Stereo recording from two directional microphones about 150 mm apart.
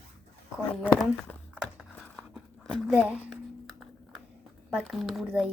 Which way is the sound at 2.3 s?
5° right (ahead or behind).